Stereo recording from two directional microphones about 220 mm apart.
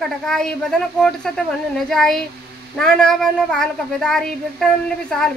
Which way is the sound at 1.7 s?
Centre (ahead or behind).